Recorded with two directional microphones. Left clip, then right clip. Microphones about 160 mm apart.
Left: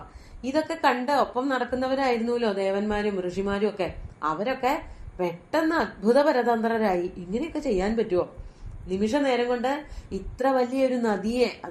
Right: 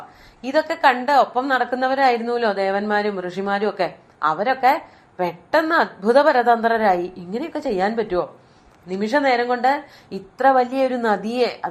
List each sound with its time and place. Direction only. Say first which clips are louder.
0.4 s a woman's voice: right 7 dB; 25° right (ahead or behind)